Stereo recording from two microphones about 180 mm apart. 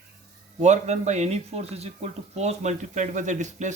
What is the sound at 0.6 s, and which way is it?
Speech, 40° right (ahead or behind).